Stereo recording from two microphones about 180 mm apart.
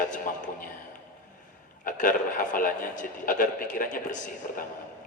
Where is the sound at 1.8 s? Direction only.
50° left (ahead or behind).